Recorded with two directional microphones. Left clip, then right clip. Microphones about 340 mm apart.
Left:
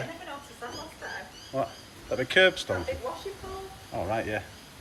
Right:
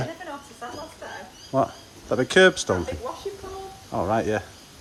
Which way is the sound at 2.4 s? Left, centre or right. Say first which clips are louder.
Right 4 dB; right.